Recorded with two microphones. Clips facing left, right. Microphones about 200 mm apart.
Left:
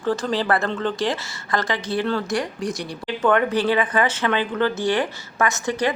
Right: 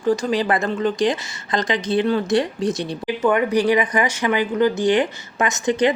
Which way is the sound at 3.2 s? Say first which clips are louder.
Right 1 dB; 10° right (ahead or behind).